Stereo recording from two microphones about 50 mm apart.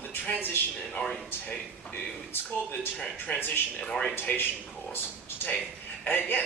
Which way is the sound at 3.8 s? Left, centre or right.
Centre.